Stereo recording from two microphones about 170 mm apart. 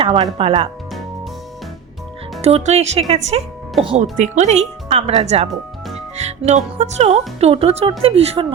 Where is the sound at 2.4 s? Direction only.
40° right (ahead or behind).